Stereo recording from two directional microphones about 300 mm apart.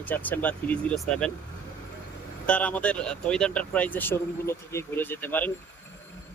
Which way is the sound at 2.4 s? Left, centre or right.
Centre.